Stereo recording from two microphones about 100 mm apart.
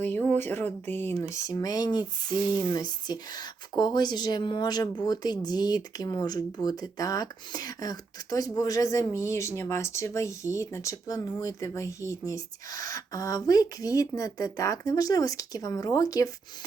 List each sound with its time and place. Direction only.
0.0 s speech: 20° left (ahead or behind)
1.5 s speech: 40° left (ahead or behind)